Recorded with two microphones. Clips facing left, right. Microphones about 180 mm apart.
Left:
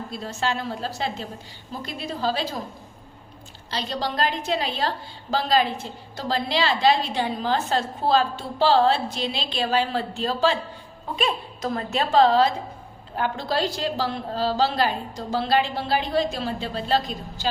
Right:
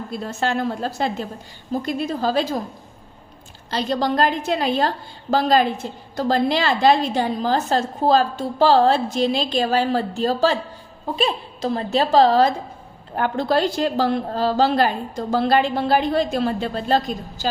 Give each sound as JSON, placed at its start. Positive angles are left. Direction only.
{"t": 0.1, "sound": "a woman's voice", "side_deg": -50}
{"t": 3.7, "sound": "a woman's voice", "side_deg": -50}
{"t": 11.2, "sound": "a woman's voice", "side_deg": -30}